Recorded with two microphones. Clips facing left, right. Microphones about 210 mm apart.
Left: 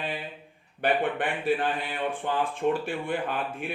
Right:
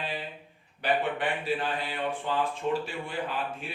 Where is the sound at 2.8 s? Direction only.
55° left (ahead or behind).